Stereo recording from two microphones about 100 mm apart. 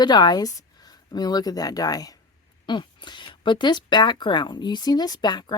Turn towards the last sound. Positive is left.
turn(degrees=45)  # may be behind; listen again after turning